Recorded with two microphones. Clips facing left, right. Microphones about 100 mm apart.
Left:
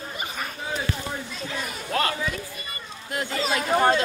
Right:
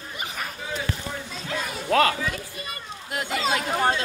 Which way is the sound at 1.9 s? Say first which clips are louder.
Right 6 dB; 90° right.